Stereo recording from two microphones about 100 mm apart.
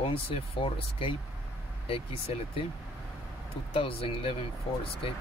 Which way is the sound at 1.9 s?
70° left (ahead or behind).